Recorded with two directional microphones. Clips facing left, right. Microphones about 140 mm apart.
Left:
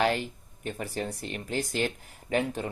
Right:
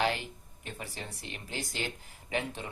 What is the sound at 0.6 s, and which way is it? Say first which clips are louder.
Speech: left 9 dB; 45° left (ahead or behind).